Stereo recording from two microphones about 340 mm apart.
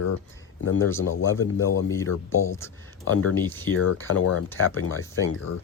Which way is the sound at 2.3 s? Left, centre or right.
Centre.